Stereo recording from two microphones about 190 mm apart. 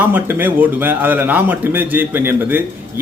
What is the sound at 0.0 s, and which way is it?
A man's voice, 10° right (ahead or behind).